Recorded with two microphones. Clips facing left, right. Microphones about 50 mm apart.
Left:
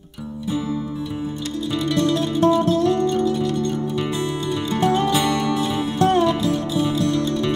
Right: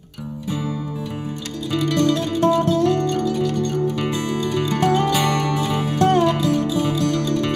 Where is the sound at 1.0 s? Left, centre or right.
Right.